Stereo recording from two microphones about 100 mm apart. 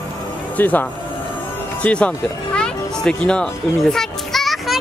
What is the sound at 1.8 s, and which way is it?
Speech, 10° left (ahead or behind).